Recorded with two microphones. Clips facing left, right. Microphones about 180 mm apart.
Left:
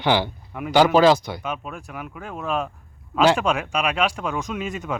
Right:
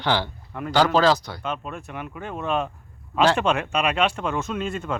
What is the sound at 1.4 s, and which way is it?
Speech, 5° left (ahead or behind).